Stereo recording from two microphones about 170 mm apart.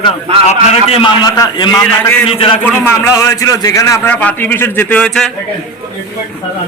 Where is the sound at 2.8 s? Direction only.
15° left (ahead or behind).